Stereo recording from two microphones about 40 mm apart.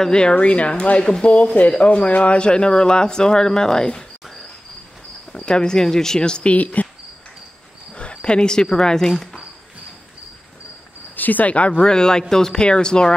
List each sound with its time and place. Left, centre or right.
0.0 s speech: left
5.3 s speech: left
6.5 s speech: left
7.9 s speech: left
11.1 s speech: left
11.8 s speech: centre